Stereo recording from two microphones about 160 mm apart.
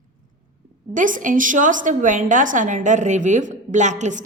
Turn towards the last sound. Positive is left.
turn(degrees=-50)  # may be behind; listen again after turning